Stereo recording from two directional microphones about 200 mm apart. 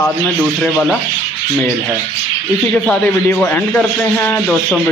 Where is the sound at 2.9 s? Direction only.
10° left (ahead or behind).